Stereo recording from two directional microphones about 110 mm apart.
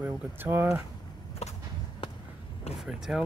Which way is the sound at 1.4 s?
75° left (ahead or behind).